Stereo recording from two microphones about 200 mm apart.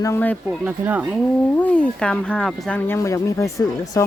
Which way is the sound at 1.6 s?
5° left (ahead or behind).